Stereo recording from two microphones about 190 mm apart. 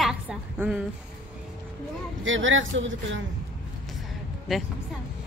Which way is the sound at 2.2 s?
90° right.